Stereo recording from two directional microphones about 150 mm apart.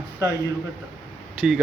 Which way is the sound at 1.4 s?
5° right (ahead or behind).